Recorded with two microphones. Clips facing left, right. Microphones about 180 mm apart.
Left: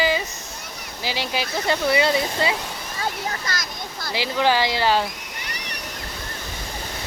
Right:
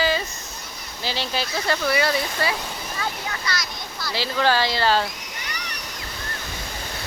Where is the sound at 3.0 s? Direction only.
40° left (ahead or behind).